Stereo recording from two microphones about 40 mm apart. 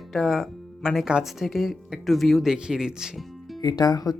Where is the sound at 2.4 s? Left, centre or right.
Centre.